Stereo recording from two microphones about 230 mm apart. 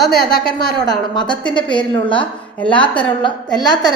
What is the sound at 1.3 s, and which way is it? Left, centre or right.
Speech, centre.